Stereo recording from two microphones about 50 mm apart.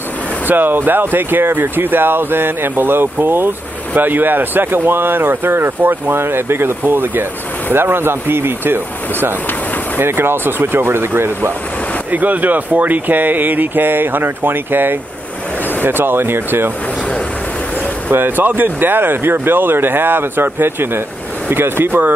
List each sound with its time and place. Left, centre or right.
0.5 s speech: right
12.1 s speech: right
18.1 s speech: right